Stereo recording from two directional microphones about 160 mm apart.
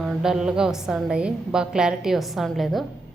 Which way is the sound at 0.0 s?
Centre (ahead or behind).